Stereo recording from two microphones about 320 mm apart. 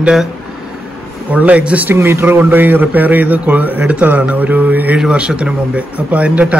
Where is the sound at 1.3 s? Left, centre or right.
Centre.